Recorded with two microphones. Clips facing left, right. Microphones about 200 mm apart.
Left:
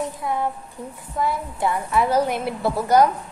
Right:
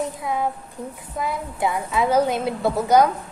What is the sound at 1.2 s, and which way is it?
A woman's voice, 20° right (ahead or behind).